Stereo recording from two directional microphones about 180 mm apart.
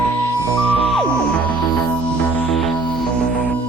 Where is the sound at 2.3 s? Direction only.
Centre (ahead or behind).